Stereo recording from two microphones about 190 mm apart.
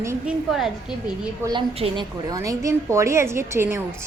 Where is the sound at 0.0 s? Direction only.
15° right (ahead or behind).